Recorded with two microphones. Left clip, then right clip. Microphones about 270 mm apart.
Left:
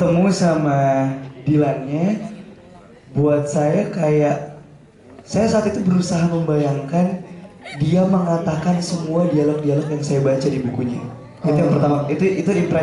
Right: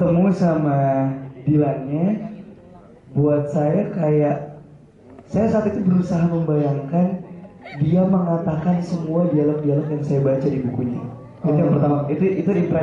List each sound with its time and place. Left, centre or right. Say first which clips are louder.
0.0 s a man's voice: left 2 dB; centre